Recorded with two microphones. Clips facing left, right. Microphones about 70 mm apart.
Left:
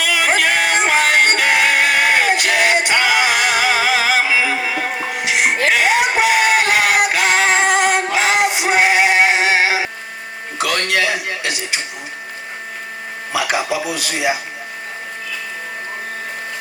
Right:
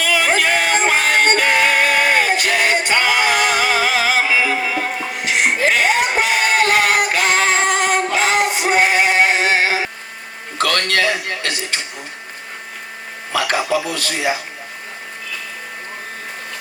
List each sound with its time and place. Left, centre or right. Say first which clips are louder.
0.0 s music: even; right
0.5 s music: even; left
1.1 s music: even; right
5.5 s music: right 1 dB; left
5.7 s music: left 1 dB; right
8.2 s synthetic singing: left 1 dB; right
10.6 s a sound: right 1 dB; centre
13.3 s a man's voice: right 1 dB; centre